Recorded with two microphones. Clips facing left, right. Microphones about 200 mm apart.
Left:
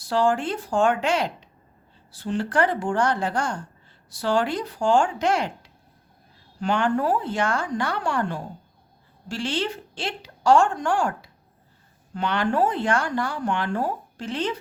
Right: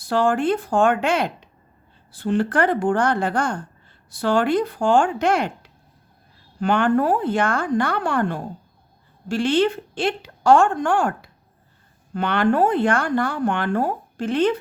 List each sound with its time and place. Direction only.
0.0 s a woman's voice: 55° right (ahead or behind)